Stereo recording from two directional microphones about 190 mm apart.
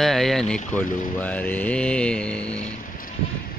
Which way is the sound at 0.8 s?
45° left (ahead or behind).